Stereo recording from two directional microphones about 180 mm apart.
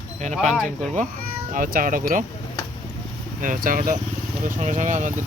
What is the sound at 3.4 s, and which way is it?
Speech, 50° right (ahead or behind).